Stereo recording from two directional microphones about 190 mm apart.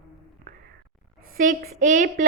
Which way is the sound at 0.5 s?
45° right (ahead or behind).